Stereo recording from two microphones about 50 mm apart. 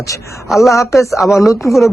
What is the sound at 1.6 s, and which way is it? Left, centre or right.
Speech, left.